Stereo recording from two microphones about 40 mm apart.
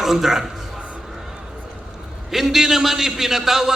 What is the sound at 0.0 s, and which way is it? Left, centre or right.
Speech, centre.